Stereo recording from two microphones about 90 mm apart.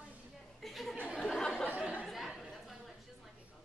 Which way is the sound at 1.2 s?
5° left (ahead or behind).